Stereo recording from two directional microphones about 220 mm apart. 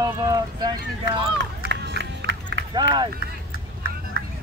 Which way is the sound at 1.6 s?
50° right (ahead or behind).